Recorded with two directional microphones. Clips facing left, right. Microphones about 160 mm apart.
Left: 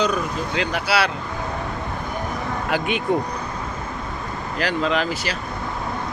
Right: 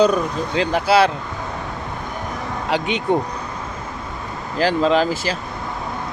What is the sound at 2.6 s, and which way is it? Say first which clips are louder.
Speech: right 2 dB; 25° right (ahead or behind).